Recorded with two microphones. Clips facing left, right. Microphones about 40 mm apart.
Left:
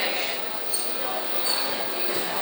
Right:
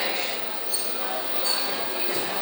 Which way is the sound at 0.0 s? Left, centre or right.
Centre.